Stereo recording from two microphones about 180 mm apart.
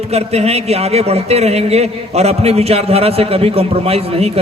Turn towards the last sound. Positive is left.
turn(degrees=-35)  # may be behind; listen again after turning